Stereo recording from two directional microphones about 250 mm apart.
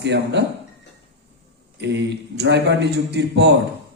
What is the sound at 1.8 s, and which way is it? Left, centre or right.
A man's voice, right.